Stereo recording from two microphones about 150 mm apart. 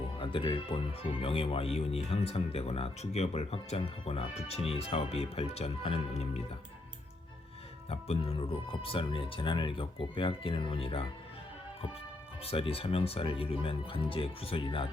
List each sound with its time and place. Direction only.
0.2 s speech: 35° left (ahead or behind)
7.9 s speech: 45° left (ahead or behind)
12.4 s speech: 40° left (ahead or behind)